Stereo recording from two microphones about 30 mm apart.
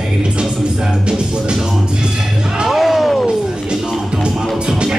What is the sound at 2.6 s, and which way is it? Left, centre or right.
Music, centre.